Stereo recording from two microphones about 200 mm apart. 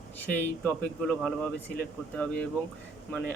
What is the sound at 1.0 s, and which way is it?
Speech, 5° left (ahead or behind).